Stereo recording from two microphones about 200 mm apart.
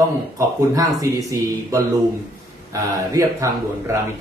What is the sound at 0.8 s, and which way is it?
Speech, 15° right (ahead or behind).